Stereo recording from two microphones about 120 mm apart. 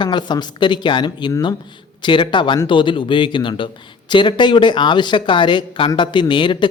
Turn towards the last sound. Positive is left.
turn(degrees=40)  # may be behind; listen again after turning